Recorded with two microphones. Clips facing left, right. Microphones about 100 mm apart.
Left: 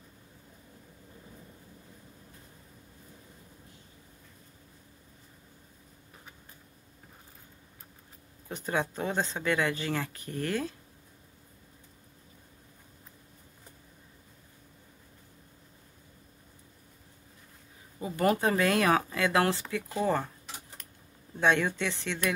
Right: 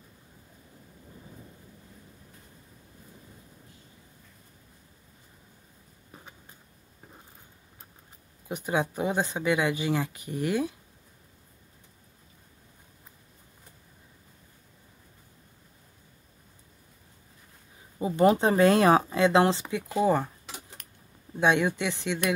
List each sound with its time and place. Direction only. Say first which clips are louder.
8.5 s speech: right 3 dB; 15° right (ahead or behind)
17.9 s speech: right 5 dB; 20° right (ahead or behind)
21.4 s speech: right 2 dB; 15° right (ahead or behind)